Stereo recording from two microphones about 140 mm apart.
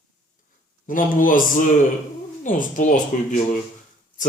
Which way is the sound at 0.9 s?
75° left (ahead or behind).